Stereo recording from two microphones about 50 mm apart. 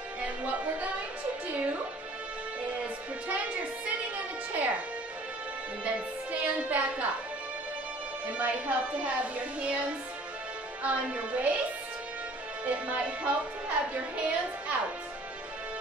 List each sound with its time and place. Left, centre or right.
0.2 s music: right
3.3 s music: right
5.9 s speech: right
8.4 s speech: right
12.6 s speech: right